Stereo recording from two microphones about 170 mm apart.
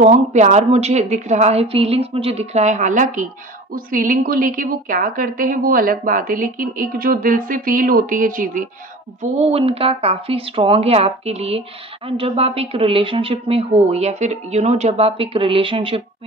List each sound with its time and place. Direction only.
0.0 s a woman's voice: 45° right (ahead or behind)
9.2 s a woman's voice: 35° right (ahead or behind)